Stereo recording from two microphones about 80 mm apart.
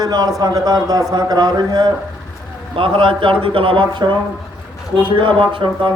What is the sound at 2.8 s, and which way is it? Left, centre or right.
A man's voice, right.